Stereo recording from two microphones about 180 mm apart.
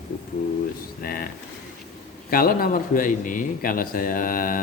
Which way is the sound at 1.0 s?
55° left (ahead or behind).